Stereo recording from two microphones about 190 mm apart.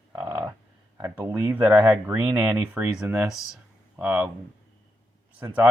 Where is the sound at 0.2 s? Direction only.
15° right (ahead or behind).